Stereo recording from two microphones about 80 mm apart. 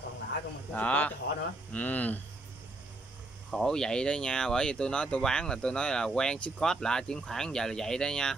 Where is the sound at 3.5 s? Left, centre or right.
Centre.